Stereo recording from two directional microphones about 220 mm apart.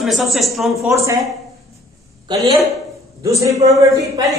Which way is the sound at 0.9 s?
15° right (ahead or behind).